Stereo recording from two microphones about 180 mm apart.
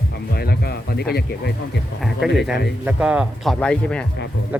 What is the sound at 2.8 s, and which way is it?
Speech, 5° right (ahead or behind).